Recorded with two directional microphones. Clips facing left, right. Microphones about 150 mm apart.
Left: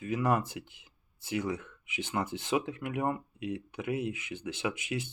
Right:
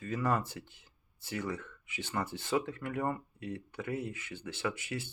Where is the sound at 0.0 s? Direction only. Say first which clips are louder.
Left 3 dB; 15° left (ahead or behind).